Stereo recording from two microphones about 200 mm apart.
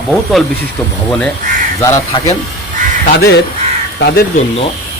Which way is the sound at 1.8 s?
15° left (ahead or behind).